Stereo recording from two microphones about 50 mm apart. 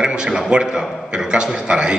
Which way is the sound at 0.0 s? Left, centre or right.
Centre.